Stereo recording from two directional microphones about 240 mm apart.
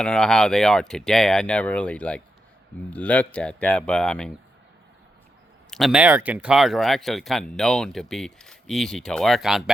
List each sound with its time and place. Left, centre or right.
0.0 s speech: centre
5.7 s speech: centre